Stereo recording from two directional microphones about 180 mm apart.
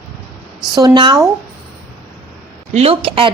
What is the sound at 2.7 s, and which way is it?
Speech, 35° right (ahead or behind).